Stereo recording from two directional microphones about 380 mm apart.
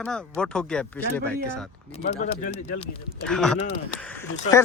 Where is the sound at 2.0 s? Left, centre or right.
Centre.